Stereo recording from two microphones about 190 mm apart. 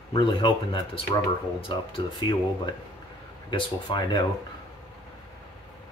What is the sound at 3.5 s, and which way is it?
Speech, 25° left (ahead or behind).